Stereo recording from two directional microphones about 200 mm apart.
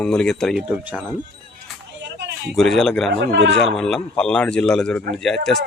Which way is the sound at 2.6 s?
Centre (ahead or behind).